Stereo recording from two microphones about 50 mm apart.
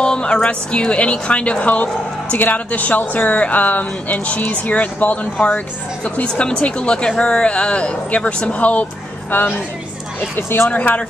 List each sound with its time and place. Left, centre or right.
0.0 s speech: centre
6.2 s speech: left
10.7 s speech: left